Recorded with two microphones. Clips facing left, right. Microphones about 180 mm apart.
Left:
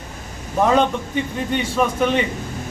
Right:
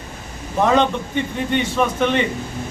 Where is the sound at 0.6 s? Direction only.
5° left (ahead or behind).